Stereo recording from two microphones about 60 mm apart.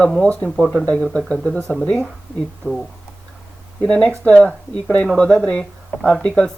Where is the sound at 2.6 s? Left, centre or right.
Left.